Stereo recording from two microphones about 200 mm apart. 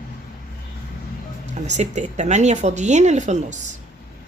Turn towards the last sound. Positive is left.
turn(degrees=-35)  # may be behind; listen again after turning